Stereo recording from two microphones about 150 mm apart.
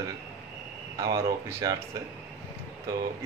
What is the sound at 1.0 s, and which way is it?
Speech, 25° right (ahead or behind).